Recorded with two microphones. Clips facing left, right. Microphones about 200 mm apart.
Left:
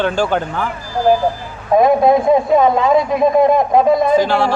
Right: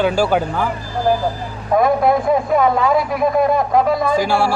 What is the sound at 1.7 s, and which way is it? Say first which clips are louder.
A man's voice: left 3 dB; 20° left (ahead or behind).